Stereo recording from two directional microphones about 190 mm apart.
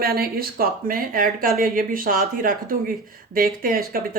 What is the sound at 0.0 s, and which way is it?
Speech, 55° right (ahead or behind).